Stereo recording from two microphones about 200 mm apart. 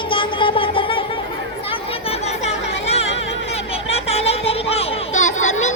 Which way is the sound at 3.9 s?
30° left (ahead or behind).